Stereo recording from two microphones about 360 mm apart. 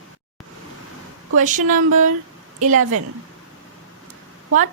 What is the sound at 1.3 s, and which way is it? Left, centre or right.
Speech, right.